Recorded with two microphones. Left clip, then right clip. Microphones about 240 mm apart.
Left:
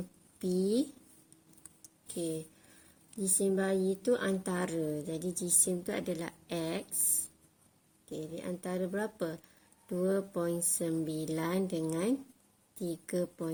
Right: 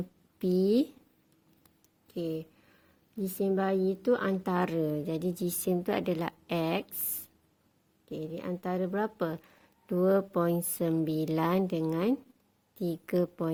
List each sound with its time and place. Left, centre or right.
0.3 s speech: right
1.8 s a sound: right
3.2 s speech: right